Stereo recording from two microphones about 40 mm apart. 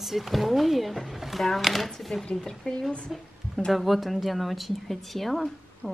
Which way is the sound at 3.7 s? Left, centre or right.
Centre.